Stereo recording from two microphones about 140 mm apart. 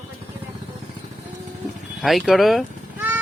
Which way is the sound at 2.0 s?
Centre (ahead or behind).